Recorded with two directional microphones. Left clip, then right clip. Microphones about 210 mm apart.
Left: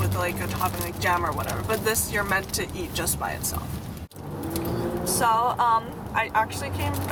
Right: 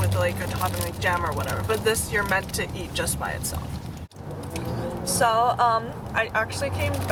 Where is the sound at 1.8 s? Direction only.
10° left (ahead or behind).